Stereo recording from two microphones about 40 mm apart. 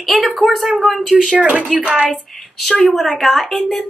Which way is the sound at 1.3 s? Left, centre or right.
Right.